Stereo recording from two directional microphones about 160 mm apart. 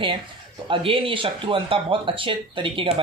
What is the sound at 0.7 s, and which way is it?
Speech, 35° right (ahead or behind).